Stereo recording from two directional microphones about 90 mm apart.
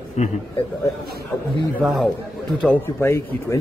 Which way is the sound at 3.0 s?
30° left (ahead or behind).